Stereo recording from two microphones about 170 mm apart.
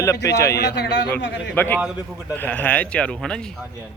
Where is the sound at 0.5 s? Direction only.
75° left (ahead or behind).